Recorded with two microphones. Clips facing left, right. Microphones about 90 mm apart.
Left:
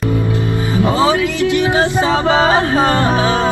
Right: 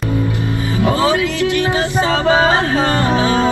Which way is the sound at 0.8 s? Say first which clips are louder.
Left 1 dB; 20° left (ahead or behind).